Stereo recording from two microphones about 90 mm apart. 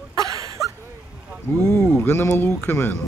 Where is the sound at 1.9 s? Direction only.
25° left (ahead or behind).